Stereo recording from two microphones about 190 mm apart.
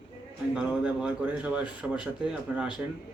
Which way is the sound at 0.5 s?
5° right (ahead or behind).